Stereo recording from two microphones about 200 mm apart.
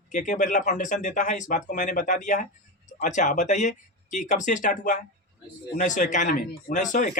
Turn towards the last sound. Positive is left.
turn(degrees=40)  # may be behind; listen again after turning